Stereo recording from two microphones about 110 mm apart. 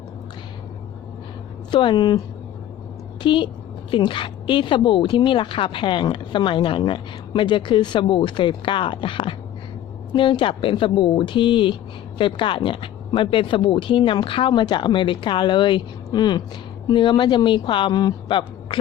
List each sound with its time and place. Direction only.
1.7 s a woman's voice: 45° left (ahead or behind)
3.2 s a woman's voice: 50° left (ahead or behind)